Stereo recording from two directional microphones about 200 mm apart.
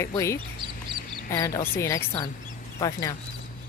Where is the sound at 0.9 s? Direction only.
25° right (ahead or behind).